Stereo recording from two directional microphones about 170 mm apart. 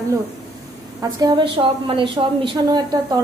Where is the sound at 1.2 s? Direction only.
30° right (ahead or behind).